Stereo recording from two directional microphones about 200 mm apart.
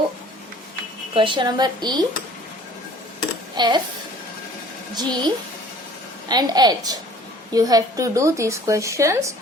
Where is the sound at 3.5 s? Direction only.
20° right (ahead or behind).